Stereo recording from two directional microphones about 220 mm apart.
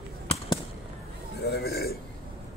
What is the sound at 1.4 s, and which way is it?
Burping, 45° left (ahead or behind).